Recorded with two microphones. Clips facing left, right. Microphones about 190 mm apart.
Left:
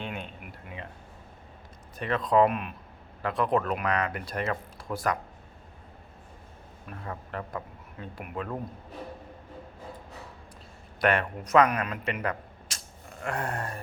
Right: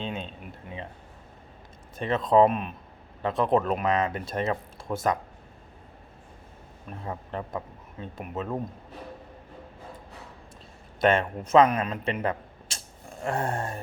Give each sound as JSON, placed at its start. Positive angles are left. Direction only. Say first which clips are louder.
{"t": 0.0, "sound": "a sound", "louder": "right 3 dB", "side_deg": -20}
{"t": 2.0, "sound": "speech", "louder": "right 3 dB", "side_deg": -25}
{"t": 6.9, "sound": "speech", "louder": "right 3 dB", "side_deg": -25}
{"t": 11.0, "sound": "speech", "louder": "right 3 dB", "side_deg": -25}